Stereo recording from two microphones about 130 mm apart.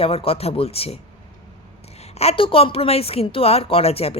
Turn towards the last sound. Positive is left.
turn(degrees=50)  # may be behind; listen again after turning